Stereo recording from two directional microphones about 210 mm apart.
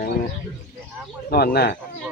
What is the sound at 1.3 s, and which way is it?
Speech, 50° left (ahead or behind).